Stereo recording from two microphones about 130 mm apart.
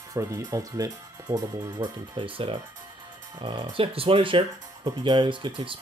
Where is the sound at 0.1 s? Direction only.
25° right (ahead or behind); by 2.6 s 45° right (ahead or behind).